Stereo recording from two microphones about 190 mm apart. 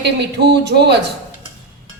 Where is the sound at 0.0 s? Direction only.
65° right (ahead or behind).